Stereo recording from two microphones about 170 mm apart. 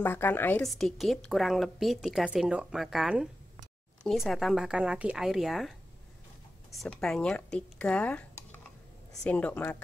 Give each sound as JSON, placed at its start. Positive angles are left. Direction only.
{"t": 0.0, "sound": "a woman's voice", "side_deg": 10}
{"t": 0.7, "sound": "a woman's voice", "side_deg": 0}
{"t": 6.8, "sound": "a woman's voice", "side_deg": 5}